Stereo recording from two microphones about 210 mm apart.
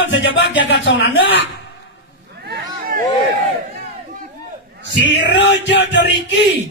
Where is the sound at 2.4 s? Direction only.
45° right (ahead or behind).